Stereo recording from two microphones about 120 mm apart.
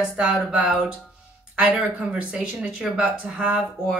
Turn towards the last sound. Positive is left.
turn(degrees=-10)  # may be behind; listen again after turning